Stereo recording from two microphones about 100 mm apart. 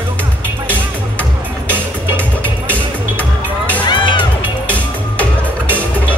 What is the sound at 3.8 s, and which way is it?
Music, 50° left (ahead or behind).